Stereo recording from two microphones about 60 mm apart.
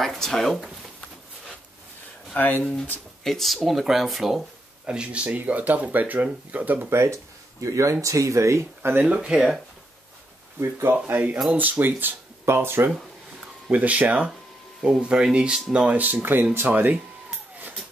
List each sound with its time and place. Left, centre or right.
0.0 s speech: centre
2.3 s speech: left
3.3 s speech: centre
4.8 s speech: centre
6.9 s speech: right
9.0 s speech: centre
10.6 s speech: right
11.5 s speech: right
13.7 s speech: right
14.8 s speech: centre
16.0 s speech: right